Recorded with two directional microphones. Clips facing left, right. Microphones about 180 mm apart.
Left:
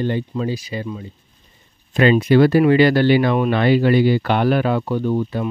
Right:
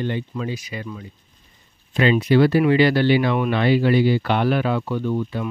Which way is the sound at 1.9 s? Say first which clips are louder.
Left 3 dB; 50° left (ahead or behind).